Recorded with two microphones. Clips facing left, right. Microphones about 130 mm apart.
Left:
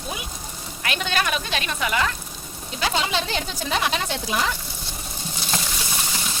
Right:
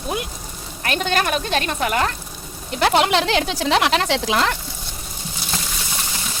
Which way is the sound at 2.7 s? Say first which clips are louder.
Right 8 dB; 65° right (ahead or behind).